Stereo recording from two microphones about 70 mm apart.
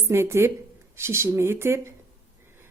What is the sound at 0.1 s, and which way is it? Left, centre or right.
Speech, right.